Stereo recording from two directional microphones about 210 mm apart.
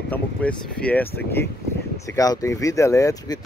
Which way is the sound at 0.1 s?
5° left (ahead or behind).